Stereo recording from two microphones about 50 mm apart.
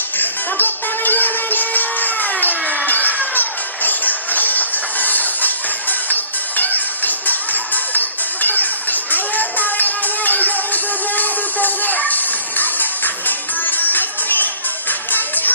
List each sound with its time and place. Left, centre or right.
0.2 s music: left